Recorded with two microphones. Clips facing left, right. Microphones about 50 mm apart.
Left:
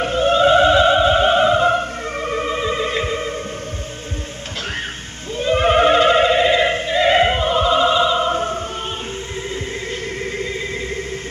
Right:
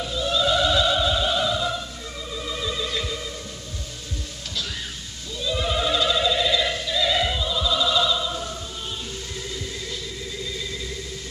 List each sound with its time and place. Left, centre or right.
0.0 s opera: left
5.4 s opera: left
10.3 s vehicle: left